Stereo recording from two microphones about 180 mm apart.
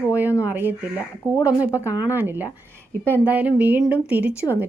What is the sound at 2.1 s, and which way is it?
Speech, 10° right (ahead or behind).